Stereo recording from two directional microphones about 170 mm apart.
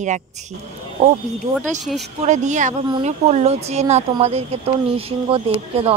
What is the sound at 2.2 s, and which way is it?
A woman's voice, 45° right (ahead or behind).